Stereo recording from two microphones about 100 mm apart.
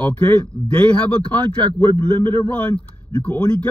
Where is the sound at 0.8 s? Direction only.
10° left (ahead or behind).